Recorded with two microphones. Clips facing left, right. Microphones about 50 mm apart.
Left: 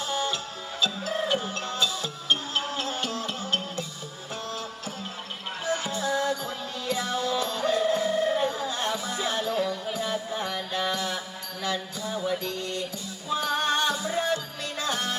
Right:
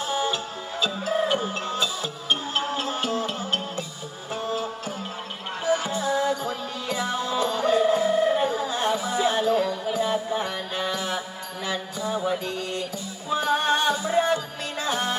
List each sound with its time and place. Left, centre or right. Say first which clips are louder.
0.0 s music: right 3 dB; centre